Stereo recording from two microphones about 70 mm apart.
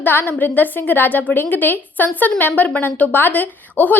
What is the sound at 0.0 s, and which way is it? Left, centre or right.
A woman's voice, left.